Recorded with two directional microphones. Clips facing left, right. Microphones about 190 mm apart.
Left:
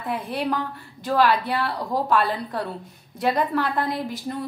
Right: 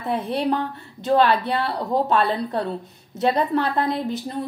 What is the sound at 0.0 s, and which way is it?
Speech, 25° right (ahead or behind).